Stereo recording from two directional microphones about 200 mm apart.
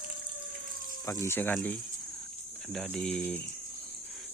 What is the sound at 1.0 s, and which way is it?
Speech, 10° left (ahead or behind).